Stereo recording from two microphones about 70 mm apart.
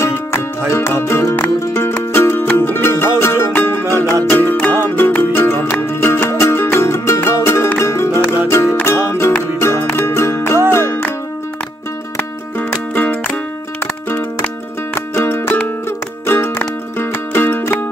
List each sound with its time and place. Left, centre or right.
0.7 s music: left
12.2 s music: left
15.0 s music: left